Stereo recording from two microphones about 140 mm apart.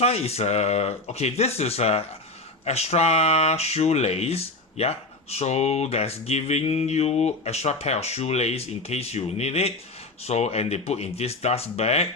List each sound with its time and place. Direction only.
0.0 s speech: 50° left (ahead or behind)